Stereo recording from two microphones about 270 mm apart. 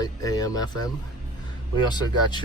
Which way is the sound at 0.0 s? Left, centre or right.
Centre.